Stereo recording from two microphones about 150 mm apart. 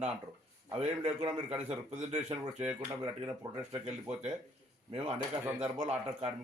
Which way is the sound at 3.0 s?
35° right (ahead or behind).